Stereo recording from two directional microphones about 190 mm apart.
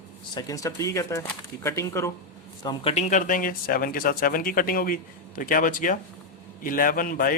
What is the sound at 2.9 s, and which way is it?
Speech, 45° left (ahead or behind).